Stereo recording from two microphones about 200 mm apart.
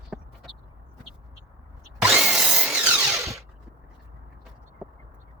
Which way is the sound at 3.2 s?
15° right (ahead or behind).